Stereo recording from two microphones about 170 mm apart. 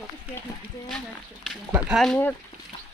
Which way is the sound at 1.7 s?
10° right (ahead or behind).